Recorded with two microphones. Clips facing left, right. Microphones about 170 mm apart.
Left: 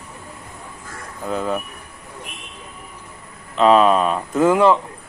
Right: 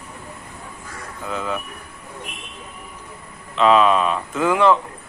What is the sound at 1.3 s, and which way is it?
Speech, 40° left (ahead or behind).